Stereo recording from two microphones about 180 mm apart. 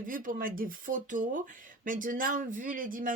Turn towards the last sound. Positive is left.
turn(degrees=-50)  # may be behind; listen again after turning